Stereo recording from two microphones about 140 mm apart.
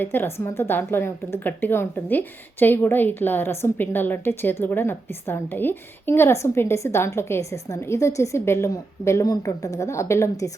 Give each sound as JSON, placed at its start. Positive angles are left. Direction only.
{"t": 0.0, "sound": "a woman's voice", "side_deg": 15}